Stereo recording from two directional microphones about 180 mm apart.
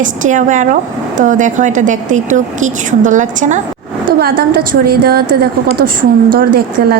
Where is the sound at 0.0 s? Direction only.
45° right (ahead or behind).